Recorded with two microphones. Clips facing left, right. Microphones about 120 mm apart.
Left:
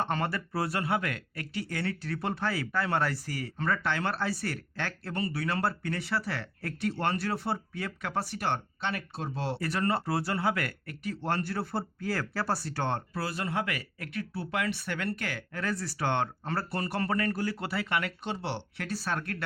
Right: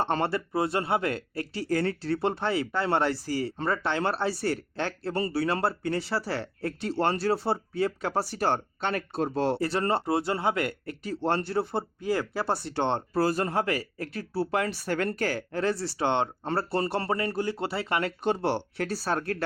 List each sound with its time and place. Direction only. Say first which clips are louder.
0.0 s speech: right 4 dB; 30° right (ahead or behind); by 9.6 s 50° right (ahead or behind)
9.6 s speech: right 3 dB; 30° right (ahead or behind)
13.1 s speech: right 7 dB; 40° right (ahead or behind)
18.2 s speech: right 8 dB; 45° right (ahead or behind)